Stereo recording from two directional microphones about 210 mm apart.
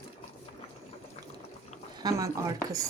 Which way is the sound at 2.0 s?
15° right (ahead or behind).